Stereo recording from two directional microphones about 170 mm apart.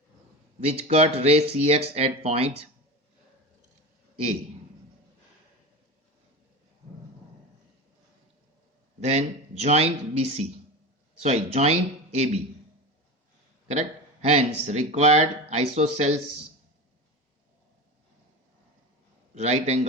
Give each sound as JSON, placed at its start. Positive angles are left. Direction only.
{"t": 0.6, "sound": "speech", "side_deg": -35}
{"t": 9.0, "sound": "speech", "side_deg": -40}
{"t": 13.7, "sound": "speech", "side_deg": -40}
{"t": 19.3, "sound": "speech", "side_deg": -40}